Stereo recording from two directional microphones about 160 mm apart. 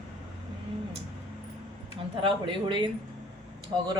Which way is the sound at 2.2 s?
30° right (ahead or behind).